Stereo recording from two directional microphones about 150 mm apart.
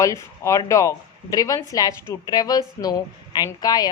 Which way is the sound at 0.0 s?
20° left (ahead or behind).